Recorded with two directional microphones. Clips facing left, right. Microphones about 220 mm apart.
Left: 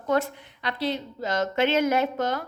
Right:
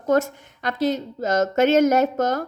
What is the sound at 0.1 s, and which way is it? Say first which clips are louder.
A woman's voice: right 5 dB; 45° right (ahead or behind).